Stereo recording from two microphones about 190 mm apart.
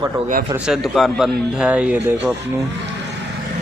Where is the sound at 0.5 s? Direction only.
5° right (ahead or behind).